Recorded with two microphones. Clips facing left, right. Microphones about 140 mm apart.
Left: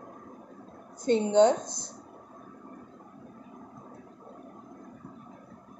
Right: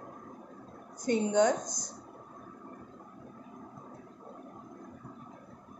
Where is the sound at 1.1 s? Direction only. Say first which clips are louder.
Left 5 dB; 25° left (ahead or behind).